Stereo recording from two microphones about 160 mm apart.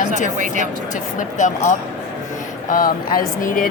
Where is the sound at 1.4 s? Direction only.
50° left (ahead or behind).